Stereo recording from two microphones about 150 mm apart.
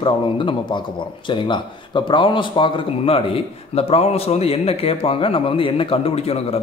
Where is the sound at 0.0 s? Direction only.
35° left (ahead or behind).